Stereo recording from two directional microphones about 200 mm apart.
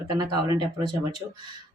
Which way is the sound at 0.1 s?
20° right (ahead or behind).